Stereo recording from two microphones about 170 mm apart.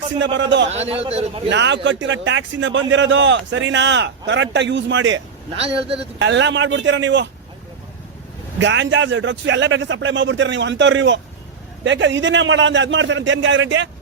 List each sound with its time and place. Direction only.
0.3 s a man's voice: 90° right
0.7 s a man's voice: 40° right (ahead or behind)
1.5 s a man's voice: 90° right
5.5 s a man's voice: 35° right (ahead or behind)
6.1 s a man's voice: 90° right
8.6 s a man's voice: 90° right